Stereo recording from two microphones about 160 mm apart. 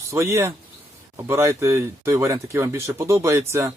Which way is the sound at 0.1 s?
15° right (ahead or behind).